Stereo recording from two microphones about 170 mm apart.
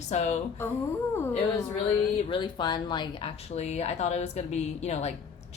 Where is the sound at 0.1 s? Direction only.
45° left (ahead or behind).